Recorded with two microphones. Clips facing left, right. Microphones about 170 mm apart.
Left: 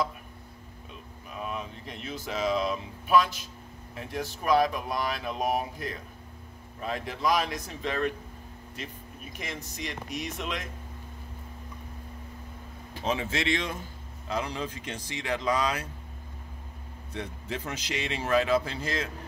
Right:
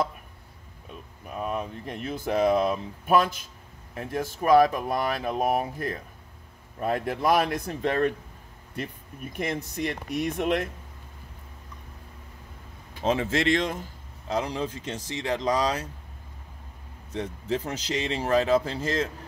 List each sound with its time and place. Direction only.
1.3 s speech: 45° right (ahead or behind)
13.1 s speech: 45° right (ahead or behind)
17.1 s speech: 35° right (ahead or behind)